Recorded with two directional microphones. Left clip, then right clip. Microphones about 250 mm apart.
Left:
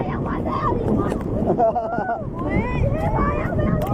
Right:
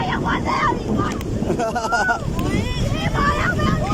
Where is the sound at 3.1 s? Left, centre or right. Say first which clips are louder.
Right 3 dB; right.